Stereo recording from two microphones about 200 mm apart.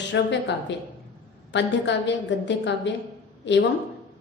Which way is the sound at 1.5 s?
60° left (ahead or behind).